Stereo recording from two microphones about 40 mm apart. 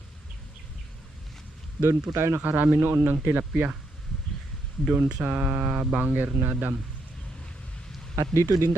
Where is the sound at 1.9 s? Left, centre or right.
Right.